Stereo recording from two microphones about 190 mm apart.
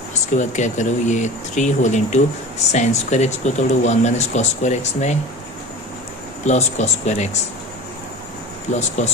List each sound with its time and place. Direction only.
0.4 s speech: 40° left (ahead or behind)
6.4 s speech: 35° left (ahead or behind)
8.7 s speech: 35° left (ahead or behind)